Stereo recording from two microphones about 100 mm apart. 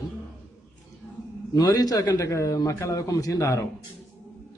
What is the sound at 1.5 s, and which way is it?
A man's voice, 40° left (ahead or behind).